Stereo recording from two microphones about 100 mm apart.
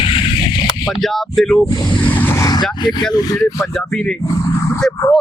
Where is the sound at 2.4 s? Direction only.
45° left (ahead or behind).